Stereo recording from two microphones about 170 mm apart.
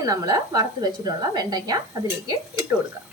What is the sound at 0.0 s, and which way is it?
A woman's voice, 20° right (ahead or behind).